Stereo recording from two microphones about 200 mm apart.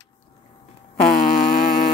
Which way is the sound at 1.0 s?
45° left (ahead or behind).